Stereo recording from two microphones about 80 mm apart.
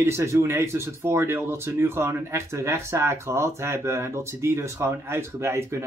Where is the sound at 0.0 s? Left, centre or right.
Right.